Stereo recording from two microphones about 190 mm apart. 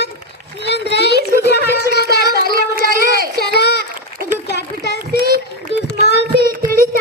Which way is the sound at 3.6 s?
60° left (ahead or behind).